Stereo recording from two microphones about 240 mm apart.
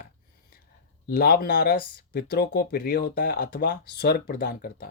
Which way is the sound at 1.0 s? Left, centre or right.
Left.